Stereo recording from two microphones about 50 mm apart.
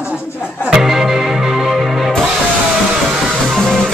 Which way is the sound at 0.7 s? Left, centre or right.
Centre.